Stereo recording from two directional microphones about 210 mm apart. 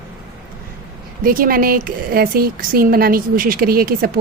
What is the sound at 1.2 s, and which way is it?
A woman's voice, 45° right (ahead or behind).